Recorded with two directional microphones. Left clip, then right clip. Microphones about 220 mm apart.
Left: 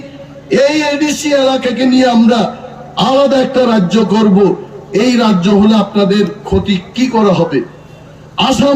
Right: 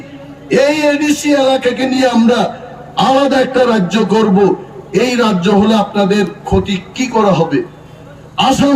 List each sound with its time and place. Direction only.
0.5 s a man's voice: centre (ahead or behind)
0.9 s a man's voice: 30° right (ahead or behind)